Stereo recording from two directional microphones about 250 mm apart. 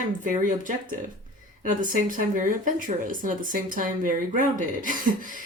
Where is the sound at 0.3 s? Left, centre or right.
Right.